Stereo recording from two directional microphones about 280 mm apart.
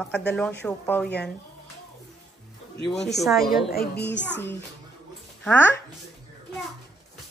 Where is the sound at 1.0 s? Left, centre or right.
Left.